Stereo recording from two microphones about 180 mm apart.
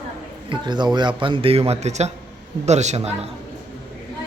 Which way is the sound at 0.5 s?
25° right (ahead or behind).